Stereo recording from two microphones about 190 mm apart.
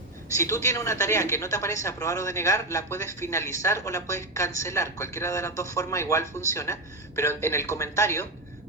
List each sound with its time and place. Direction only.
0.3 s speech: 15° left (ahead or behind)